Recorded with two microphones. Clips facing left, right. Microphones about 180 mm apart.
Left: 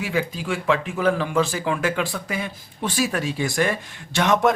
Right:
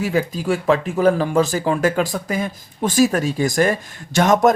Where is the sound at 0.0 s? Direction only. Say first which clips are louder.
Right 5 dB; 40° right (ahead or behind).